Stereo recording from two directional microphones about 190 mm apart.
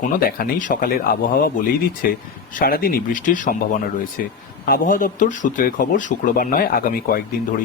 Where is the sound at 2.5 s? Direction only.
50° left (ahead or behind).